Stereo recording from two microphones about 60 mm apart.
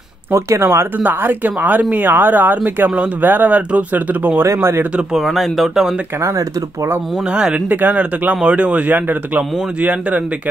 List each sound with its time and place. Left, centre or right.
0.3 s speech: right
0.9 s a man's voice: right
4.6 s speech: right
5.2 s speech: centre
6.2 s speech: right
7.2 s speech: centre
7.6 s a man's voice: right